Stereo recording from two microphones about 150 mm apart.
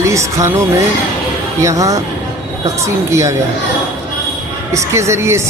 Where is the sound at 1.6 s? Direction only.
20° right (ahead or behind).